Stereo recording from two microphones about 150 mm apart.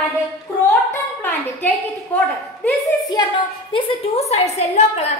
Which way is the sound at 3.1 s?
30° left (ahead or behind).